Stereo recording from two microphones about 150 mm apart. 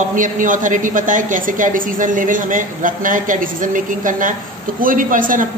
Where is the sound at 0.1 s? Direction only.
60° right (ahead or behind).